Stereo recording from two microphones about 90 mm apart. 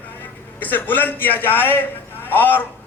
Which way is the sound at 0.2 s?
20° left (ahead or behind).